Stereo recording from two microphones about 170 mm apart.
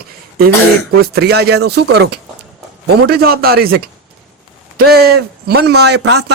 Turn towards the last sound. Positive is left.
turn(degrees=-80)